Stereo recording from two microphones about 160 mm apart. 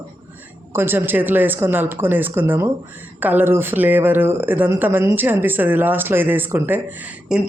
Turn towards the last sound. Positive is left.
turn(degrees=-10)  # may be behind; listen again after turning